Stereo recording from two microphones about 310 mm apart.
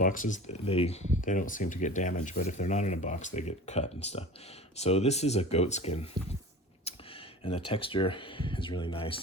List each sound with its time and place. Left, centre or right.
0.0 s speech: left
6.9 s a sound: centre
7.4 s speech: centre